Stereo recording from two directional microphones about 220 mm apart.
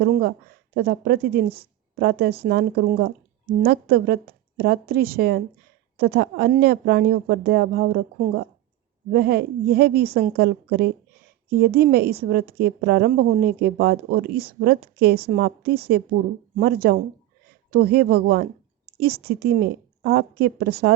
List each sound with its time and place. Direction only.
0.0 s a woman's voice: 45° right (ahead or behind)
9.1 s a woman's voice: 45° right (ahead or behind)